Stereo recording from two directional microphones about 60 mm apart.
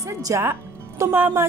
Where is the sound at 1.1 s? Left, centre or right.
Right.